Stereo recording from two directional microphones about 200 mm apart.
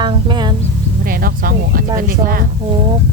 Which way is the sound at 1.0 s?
45° right (ahead or behind).